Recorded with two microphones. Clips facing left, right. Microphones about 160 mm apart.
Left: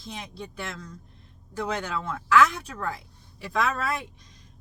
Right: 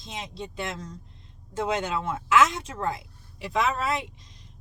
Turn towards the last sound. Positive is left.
turn(degrees=-20)  # may be behind; listen again after turning